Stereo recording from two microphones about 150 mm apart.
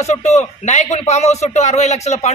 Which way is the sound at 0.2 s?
50° left (ahead or behind).